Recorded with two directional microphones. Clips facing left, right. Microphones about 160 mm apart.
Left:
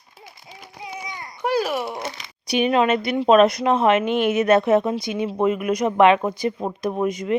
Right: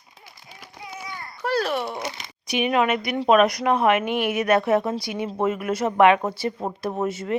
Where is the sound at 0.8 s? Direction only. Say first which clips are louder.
Left 2 dB; 20° left (ahead or behind).